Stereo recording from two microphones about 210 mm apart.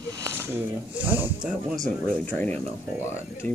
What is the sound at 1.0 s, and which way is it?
Speech, 10° right (ahead or behind).